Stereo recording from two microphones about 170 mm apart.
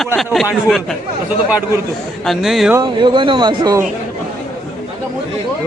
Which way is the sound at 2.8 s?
25° right (ahead or behind).